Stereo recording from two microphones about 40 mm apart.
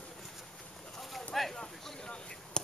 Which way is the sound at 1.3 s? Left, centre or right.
Centre.